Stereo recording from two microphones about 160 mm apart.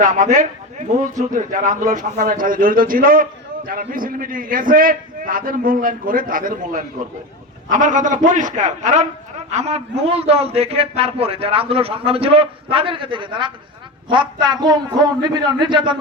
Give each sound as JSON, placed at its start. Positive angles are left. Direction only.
{"t": 0.0, "sound": "a man's voice", "side_deg": -50}